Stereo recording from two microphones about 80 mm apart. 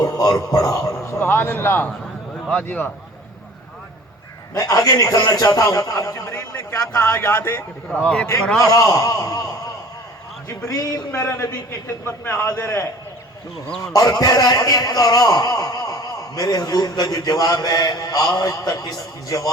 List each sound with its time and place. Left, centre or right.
0.0 s speech: left
1.2 s a man's voice: left
4.5 s a man's voice: left
6.3 s a man's voice: left
7.9 s a man's voice: centre
8.7 s a man's voice: left
10.7 s a man's voice: left
11.9 s a man's voice: left
13.8 s a man's voice: left